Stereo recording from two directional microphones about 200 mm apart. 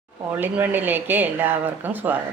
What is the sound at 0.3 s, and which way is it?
Speech, 10° right (ahead or behind).